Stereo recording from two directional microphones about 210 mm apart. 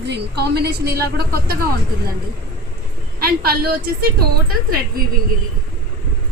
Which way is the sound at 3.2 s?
45° right (ahead or behind).